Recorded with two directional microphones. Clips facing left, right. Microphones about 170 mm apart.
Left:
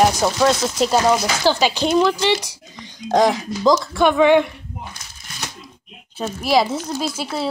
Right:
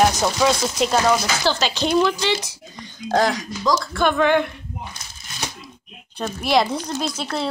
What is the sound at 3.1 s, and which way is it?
Speech, 20° left (ahead or behind).